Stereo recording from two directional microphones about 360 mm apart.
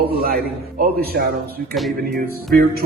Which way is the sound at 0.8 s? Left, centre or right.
Right.